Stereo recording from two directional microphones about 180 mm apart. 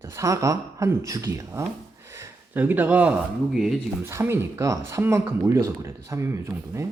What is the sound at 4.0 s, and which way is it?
Speech, 15° right (ahead or behind).